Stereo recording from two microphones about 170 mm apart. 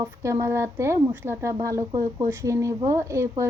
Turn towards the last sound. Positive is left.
turn(degrees=-15)  # may be behind; listen again after turning